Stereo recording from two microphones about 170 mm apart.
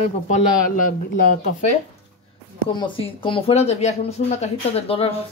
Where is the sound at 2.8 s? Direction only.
30° left (ahead or behind).